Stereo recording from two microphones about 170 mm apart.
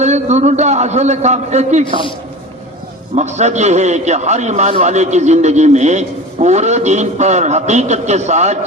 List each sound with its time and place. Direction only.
0.0 s a man's voice: 40° right (ahead or behind)
3.2 s a man's voice: 40° right (ahead or behind)